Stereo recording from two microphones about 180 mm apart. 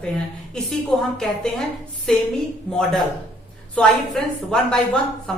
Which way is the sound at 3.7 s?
5° left (ahead or behind).